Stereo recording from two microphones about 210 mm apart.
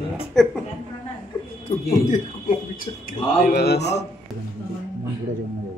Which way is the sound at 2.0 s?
40° left (ahead or behind).